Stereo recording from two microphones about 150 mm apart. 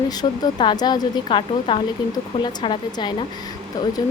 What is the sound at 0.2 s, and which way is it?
Speech, 30° left (ahead or behind).